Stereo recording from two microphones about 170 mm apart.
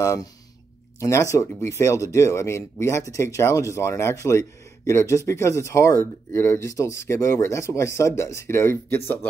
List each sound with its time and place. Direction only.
0.0 s speech: 20° left (ahead or behind)